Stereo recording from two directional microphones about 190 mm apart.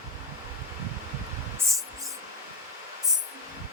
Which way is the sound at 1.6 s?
15° right (ahead or behind).